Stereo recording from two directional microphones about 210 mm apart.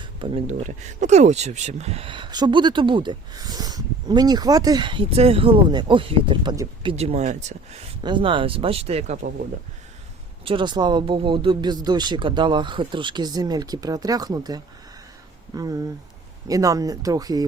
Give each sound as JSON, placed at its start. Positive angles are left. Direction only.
{"t": 0.0, "sound": "speech", "side_deg": -25}
{"t": 8.0, "sound": "speech", "side_deg": -25}
{"t": 10.4, "sound": "speech", "side_deg": -25}